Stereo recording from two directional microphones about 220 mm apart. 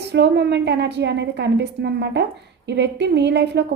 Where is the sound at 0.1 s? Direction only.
50° right (ahead or behind).